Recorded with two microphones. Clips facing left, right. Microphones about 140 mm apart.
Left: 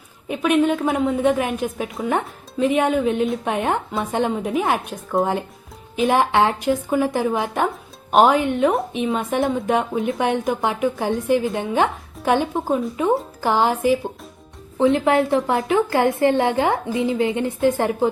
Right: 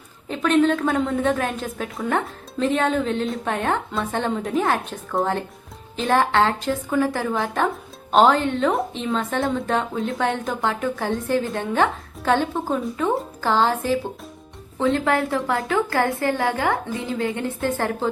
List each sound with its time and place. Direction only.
0.3 s a woman's voice: 15° left (ahead or behind)
6.1 s a woman's voice: 15° left (ahead or behind)